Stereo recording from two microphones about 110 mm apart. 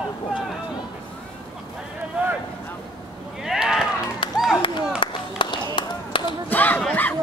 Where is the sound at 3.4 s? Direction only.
5° right (ahead or behind).